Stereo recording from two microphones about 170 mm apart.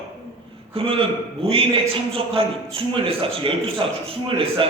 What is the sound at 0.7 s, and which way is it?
A man's voice, 35° right (ahead or behind).